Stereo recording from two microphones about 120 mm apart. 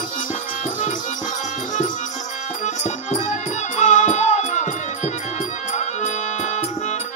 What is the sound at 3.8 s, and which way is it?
Music, 90° left.